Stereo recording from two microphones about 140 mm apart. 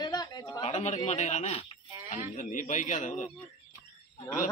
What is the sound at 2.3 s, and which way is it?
Speech, 70° left (ahead or behind).